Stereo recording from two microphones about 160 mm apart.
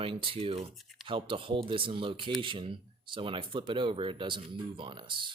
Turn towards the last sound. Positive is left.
turn(degrees=-30)  # may be behind; listen again after turning